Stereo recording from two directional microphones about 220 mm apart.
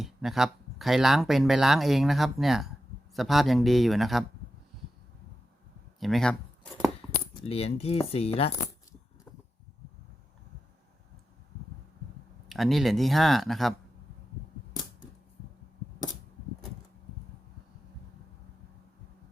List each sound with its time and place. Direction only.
0.0 s speech: centre (ahead or behind)
6.0 s speech: centre (ahead or behind)
7.4 s speech: 30° left (ahead or behind)
12.5 s speech: centre (ahead or behind)